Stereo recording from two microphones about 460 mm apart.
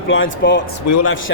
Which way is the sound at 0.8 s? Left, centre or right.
Left.